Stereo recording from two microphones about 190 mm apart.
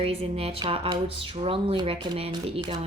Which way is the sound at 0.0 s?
30° right (ahead or behind).